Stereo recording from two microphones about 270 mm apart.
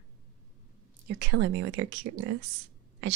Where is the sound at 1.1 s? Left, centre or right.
Right.